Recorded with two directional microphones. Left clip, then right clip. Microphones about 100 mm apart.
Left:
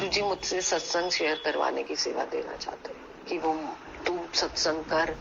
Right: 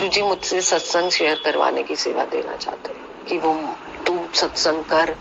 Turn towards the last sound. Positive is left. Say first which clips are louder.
# right 9 dB
turn(degrees=-45)  # may be behind; listen again after turning